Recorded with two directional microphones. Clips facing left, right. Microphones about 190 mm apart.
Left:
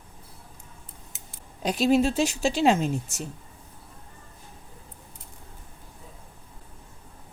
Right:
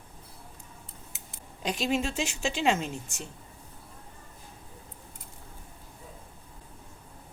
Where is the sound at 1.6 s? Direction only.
40° left (ahead or behind).